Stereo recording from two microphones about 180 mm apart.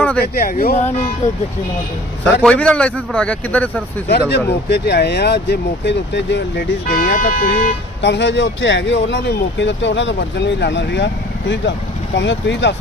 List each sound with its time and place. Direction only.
0.2 s speech: 55° left (ahead or behind)
2.4 s speech: 5° left (ahead or behind)
4.1 s speech: 65° left (ahead or behind)
8.0 s speech: 80° left